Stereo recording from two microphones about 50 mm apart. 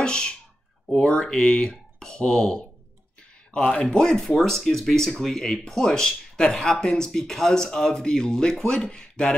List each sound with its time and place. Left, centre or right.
0.0 s speech: centre